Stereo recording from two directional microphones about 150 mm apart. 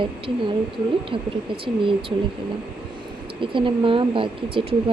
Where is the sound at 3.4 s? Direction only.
35° right (ahead or behind).